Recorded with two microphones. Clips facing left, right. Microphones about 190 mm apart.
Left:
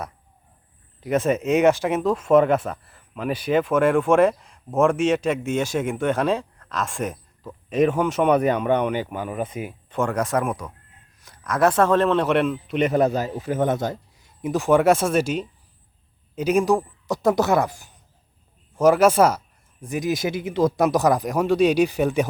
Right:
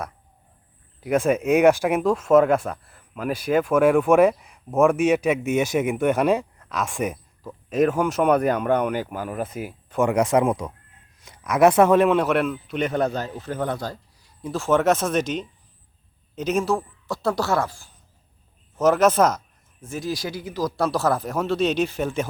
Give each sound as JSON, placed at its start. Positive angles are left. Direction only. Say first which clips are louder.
{"t": 1.5, "sound": "a man's voice", "louder": "right 2 dB", "side_deg": -15}
{"t": 2.6, "sound": "speech", "louder": "even", "side_deg": 5}
{"t": 2.9, "sound": "speech", "louder": "left 1 dB", "side_deg": -5}
{"t": 4.9, "sound": "a man's voice", "louder": "right 1 dB", "side_deg": -15}
{"t": 11.2, "sound": "a sound", "louder": "even", "side_deg": -20}
{"t": 11.5, "sound": "a man's voice", "louder": "right 3 dB", "side_deg": -15}
{"t": 13.6, "sound": "speech", "louder": "left 5 dB", "side_deg": 20}
{"t": 18.8, "sound": "speech", "louder": "left 2 dB", "side_deg": 10}